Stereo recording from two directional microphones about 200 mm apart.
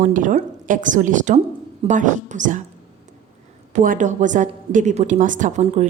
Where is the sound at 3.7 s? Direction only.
40° right (ahead or behind).